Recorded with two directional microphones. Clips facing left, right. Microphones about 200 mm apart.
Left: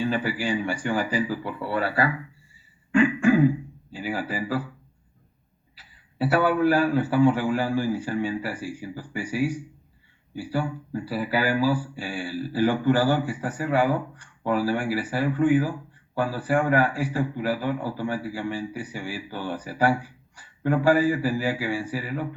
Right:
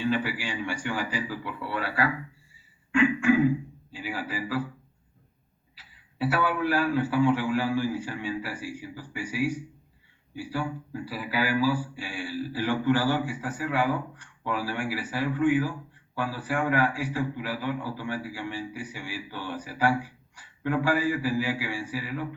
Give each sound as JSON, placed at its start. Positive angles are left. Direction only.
{"t": 0.1, "sound": "a man's voice", "side_deg": 45}
{"t": 5.7, "sound": "a man's voice", "side_deg": 40}
{"t": 11.1, "sound": "a man's voice", "side_deg": 45}